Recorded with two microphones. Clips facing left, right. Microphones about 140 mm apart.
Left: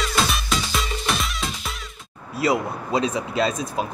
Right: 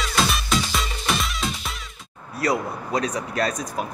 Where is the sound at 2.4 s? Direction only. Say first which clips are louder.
Left 2 dB; 20° left (ahead or behind).